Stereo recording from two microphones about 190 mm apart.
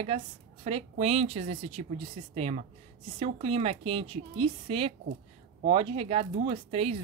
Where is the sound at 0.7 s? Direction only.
30° right (ahead or behind).